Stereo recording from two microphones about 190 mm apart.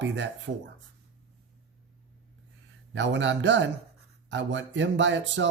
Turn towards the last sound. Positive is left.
turn(degrees=-70)  # may be behind; listen again after turning